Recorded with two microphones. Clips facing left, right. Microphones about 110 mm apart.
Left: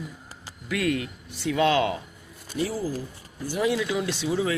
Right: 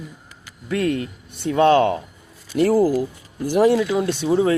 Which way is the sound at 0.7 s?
35° right (ahead or behind).